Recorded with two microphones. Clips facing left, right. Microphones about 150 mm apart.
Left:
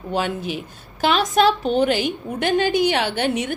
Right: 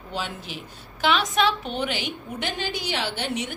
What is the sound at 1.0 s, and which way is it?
A woman's voice, 40° left (ahead or behind).